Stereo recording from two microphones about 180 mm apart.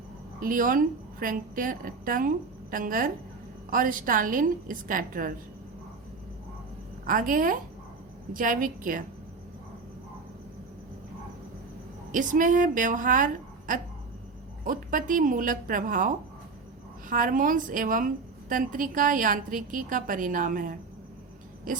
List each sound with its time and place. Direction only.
0.3 s a woman's voice: 50° right (ahead or behind)
7.0 s a woman's voice: 50° right (ahead or behind)
12.1 s a woman's voice: 45° right (ahead or behind)